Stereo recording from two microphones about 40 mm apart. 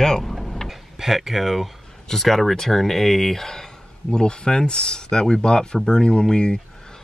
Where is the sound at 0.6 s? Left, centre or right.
Centre.